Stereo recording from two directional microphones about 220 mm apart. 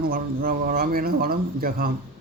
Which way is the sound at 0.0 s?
40° right (ahead or behind).